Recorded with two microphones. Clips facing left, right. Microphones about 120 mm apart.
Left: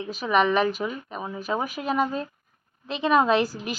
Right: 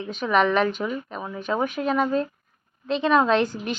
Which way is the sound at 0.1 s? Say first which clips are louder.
Right 1 dB; 5° left (ahead or behind).